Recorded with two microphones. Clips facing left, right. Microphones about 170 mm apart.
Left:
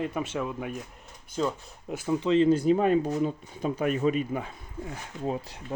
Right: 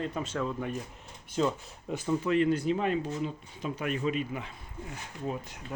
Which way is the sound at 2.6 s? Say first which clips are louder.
Left 6 dB; 40° left (ahead or behind).